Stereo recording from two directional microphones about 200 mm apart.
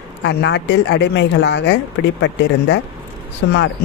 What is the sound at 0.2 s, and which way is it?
Speech, 60° left (ahead or behind).